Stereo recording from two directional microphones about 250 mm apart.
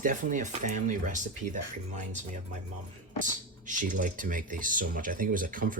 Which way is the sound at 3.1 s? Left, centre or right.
Right.